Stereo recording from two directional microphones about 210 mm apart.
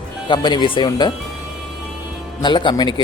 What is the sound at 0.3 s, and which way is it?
Speech, 20° left (ahead or behind).